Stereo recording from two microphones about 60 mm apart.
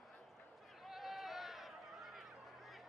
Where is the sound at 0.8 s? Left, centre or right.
Centre.